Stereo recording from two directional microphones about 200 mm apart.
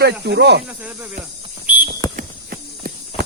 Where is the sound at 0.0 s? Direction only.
55° right (ahead or behind).